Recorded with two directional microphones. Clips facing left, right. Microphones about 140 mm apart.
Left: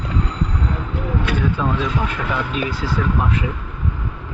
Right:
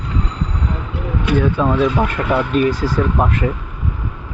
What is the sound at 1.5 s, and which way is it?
Speech, 60° right (ahead or behind).